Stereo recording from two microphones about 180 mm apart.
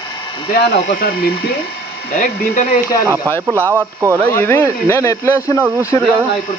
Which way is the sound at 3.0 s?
15° right (ahead or behind).